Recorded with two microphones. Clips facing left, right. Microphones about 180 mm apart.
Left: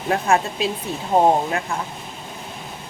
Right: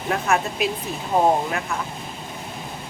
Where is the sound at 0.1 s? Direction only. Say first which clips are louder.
Left 3 dB; 30° left (ahead or behind).